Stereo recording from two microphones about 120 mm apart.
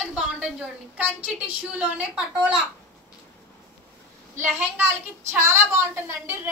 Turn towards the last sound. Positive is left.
turn(degrees=-20)  # may be behind; listen again after turning